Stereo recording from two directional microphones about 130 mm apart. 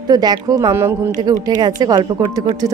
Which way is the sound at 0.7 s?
20° right (ahead or behind).